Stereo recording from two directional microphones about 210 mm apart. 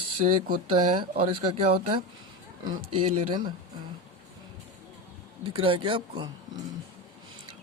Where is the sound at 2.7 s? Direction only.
90° right.